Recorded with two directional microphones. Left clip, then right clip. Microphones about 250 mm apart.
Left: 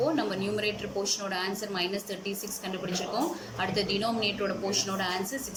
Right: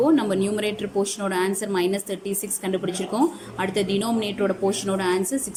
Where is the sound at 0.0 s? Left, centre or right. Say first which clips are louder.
Right 8 dB; right.